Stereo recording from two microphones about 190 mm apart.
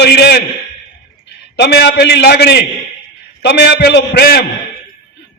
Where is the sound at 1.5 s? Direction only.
65° left (ahead or behind).